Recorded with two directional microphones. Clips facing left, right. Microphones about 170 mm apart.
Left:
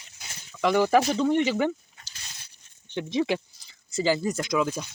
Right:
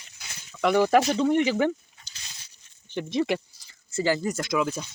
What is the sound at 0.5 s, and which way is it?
Speech, 10° right (ahead or behind).